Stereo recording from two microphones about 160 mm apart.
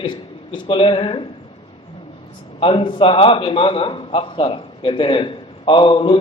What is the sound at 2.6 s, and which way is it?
A man's voice, 30° left (ahead or behind).